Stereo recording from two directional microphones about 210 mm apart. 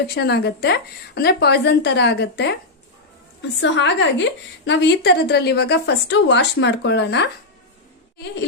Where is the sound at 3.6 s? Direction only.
60° left (ahead or behind).